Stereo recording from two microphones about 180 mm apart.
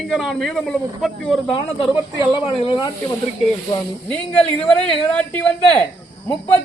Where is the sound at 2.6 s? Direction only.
25° left (ahead or behind).